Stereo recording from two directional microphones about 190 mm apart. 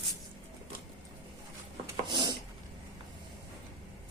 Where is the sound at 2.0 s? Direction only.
25° right (ahead or behind).